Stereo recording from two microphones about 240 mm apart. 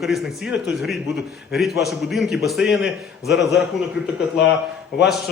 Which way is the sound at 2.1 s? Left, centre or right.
Centre.